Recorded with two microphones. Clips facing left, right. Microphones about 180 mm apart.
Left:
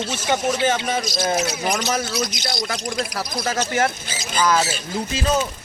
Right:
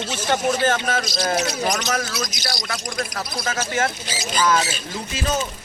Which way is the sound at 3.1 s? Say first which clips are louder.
Left 3 dB; 35° left (ahead or behind).